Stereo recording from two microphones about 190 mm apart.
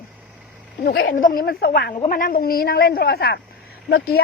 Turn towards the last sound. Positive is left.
turn(degrees=55)  # may be behind; listen again after turning